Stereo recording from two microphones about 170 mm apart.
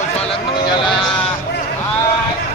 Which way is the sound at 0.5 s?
25° left (ahead or behind).